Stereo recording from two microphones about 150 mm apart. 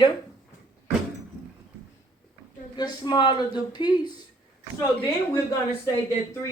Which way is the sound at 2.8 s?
25° left (ahead or behind).